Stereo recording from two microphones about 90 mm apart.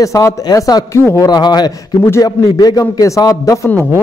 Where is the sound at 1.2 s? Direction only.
50° left (ahead or behind).